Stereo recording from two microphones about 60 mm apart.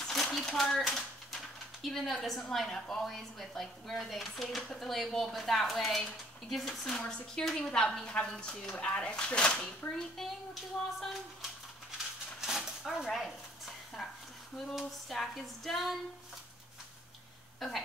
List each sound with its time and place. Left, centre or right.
0.1 s a sound: centre
0.6 s speech: centre
10.1 s speech: centre
12.4 s a sound: centre
14.8 s speech: centre
17.6 s speech: centre